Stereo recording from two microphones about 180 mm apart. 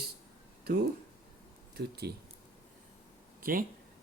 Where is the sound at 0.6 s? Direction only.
65° right (ahead or behind).